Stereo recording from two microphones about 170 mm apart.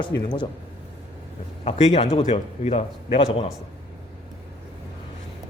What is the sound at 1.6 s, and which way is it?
A man's voice, 35° left (ahead or behind).